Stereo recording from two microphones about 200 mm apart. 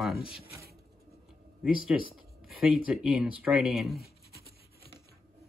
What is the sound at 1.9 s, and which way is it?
Speech, 5° right (ahead or behind).